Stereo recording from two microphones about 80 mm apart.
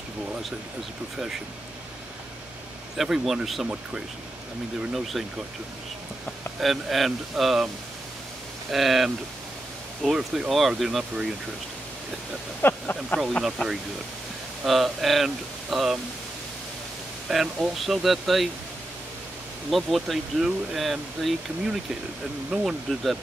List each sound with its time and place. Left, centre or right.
3.0 s speech: centre
4.9 s speech: centre
6.6 s speech: centre
12.6 s speech: left
14.6 s speech: centre
17.3 s speech: centre
19.7 s speech: centre
22.7 s speech: centre